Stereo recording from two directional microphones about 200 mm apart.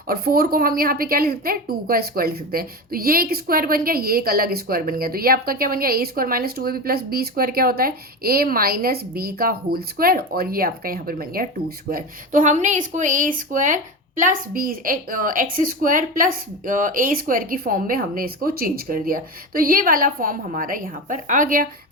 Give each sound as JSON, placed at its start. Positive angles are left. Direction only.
{"t": 0.1, "sound": "a woman's voice", "side_deg": -50}